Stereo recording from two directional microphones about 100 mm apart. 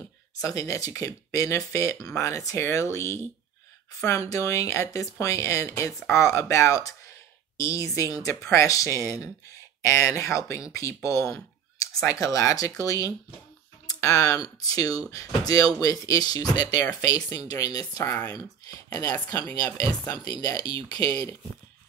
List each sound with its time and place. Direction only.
0.4 s speech: 30° left (ahead or behind)
18.1 s speech: 20° left (ahead or behind)
18.9 s speech: 30° left (ahead or behind)
20.2 s speech: 35° left (ahead or behind)